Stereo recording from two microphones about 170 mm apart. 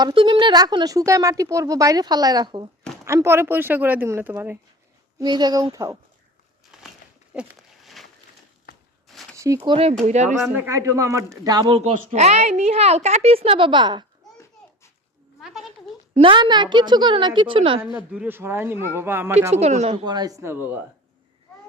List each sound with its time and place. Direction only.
0.0 s speech: 30° right (ahead or behind); by 4.5 s 10° right (ahead or behind)
5.2 s speech: 25° right (ahead or behind)
7.3 s a sound: 5° right (ahead or behind)
9.3 s speech: 15° right (ahead or behind)
10.0 s speech: 45° right (ahead or behind)
10.7 s speech: 20° right (ahead or behind)
11.4 s a woman's voice: 30° right (ahead or behind)
15.4 s speech: centre (ahead or behind)
16.1 s speech: 30° right (ahead or behind)
17.9 s speech: 10° right (ahead or behind)
19.5 s a woman's voice: 40° right (ahead or behind)
20.1 s speech: 25° right (ahead or behind)